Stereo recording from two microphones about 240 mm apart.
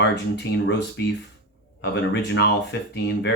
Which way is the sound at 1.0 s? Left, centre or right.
Left.